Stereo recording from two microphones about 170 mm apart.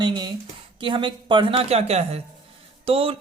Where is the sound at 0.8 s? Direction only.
30° right (ahead or behind).